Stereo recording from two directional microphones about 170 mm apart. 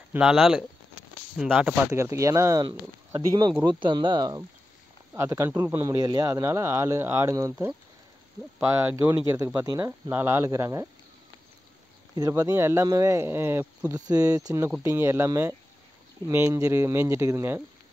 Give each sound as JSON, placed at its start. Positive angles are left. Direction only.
{"t": 0.1, "sound": "speech", "side_deg": -5}
{"t": 2.0, "sound": "speech", "side_deg": -15}
{"t": 8.5, "sound": "speech", "side_deg": -15}
{"t": 12.2, "sound": "speech", "side_deg": -20}